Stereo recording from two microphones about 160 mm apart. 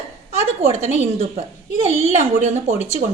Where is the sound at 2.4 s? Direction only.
45° right (ahead or behind).